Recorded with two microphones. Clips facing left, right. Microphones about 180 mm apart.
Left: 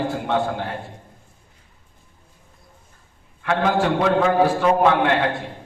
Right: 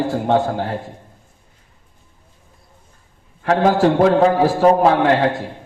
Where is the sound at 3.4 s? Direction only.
40° right (ahead or behind).